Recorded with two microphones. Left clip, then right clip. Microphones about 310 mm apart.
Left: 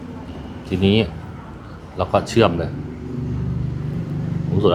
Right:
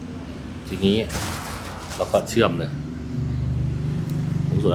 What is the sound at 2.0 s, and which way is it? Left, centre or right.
Speech, left.